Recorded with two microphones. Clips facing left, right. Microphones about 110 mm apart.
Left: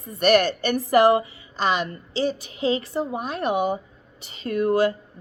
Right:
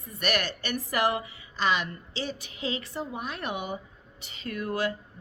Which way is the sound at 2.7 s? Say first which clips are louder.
Left 9 dB; 25° left (ahead or behind).